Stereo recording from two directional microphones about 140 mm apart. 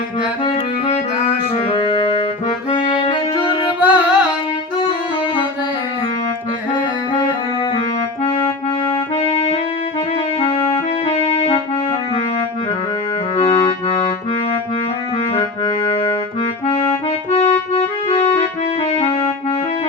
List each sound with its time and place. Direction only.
0.9 s music: 50° left (ahead or behind); by 3.7 s 35° left (ahead or behind)
3.8 s music: 10° right (ahead or behind)
4.8 s saxophone: 40° left (ahead or behind)
8.2 s music: 45° left (ahead or behind)
13.3 s music: 45° left (ahead or behind)
15.3 s music: 35° left (ahead or behind)
16.6 s music: 45° left (ahead or behind)